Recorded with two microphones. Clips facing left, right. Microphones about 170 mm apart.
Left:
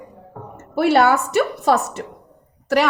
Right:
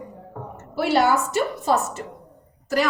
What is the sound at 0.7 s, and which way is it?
A woman's voice, 60° left (ahead or behind).